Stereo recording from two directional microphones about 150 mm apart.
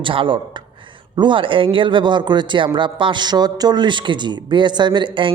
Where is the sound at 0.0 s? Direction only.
35° right (ahead or behind).